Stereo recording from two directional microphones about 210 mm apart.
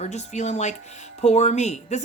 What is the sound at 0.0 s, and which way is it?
Speech, 35° left (ahead or behind).